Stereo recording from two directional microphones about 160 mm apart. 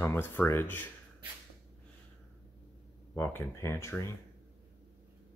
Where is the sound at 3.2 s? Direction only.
15° left (ahead or behind).